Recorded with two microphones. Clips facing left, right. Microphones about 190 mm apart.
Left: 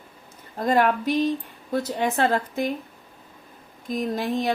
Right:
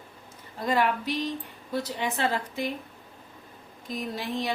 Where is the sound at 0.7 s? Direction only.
50° left (ahead or behind).